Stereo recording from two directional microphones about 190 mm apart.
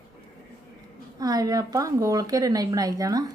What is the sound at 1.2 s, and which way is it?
A woman's voice, 20° right (ahead or behind).